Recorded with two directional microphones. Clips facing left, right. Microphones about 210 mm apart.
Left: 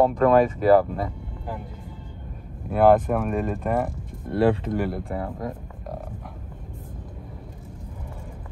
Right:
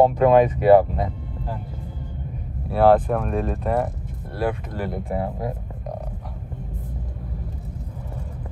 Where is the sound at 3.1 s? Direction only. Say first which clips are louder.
Even; 5° left (ahead or behind).